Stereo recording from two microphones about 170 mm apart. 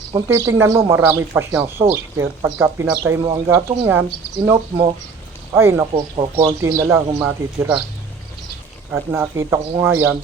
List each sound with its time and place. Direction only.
0.1 s speech: 15° right (ahead or behind)
5.5 s speech: 15° right (ahead or behind)
5.9 s speech: 30° right (ahead or behind)
6.6 s speech: 15° right (ahead or behind)
8.9 s speech: 15° right (ahead or behind)